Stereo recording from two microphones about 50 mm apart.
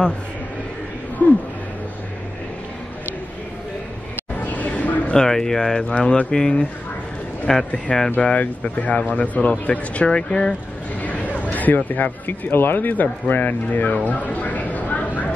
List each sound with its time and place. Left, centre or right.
1.2 s speech: left
4.5 s a sound: left
5.1 s speech: centre
7.5 s speech: centre
8.2 s speech: left
11.0 s speech: left
13.9 s a sound: left